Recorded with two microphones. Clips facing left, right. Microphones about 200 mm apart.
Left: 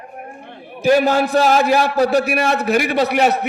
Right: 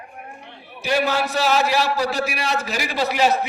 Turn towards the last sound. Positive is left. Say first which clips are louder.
# left 4 dB
turn(degrees=60)  # may be behind; listen again after turning